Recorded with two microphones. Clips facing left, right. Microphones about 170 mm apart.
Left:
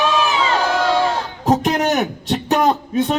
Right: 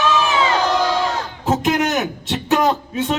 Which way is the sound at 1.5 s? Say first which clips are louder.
Left 2 dB; 35° left (ahead or behind).